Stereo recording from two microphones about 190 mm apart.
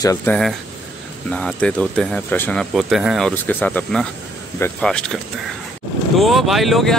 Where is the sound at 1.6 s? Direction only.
5° left (ahead or behind).